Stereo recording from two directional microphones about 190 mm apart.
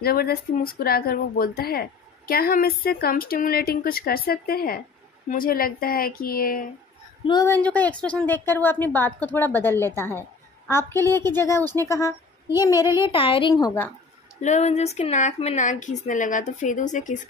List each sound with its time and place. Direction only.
0.0 s speech: 55° left (ahead or behind)
7.2 s a woman's voice: 20° left (ahead or behind)
7.5 s a woman's voice: 10° left (ahead or behind)
12.7 s a child's voice: 15° right (ahead or behind)
13.0 s a woman's voice: 25° left (ahead or behind)
14.4 s a woman's voice: 35° left (ahead or behind)